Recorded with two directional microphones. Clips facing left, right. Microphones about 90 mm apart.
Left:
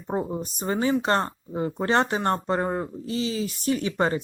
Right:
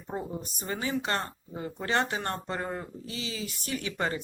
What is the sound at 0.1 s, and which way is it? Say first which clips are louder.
Speech: left 7 dB; 35° left (ahead or behind).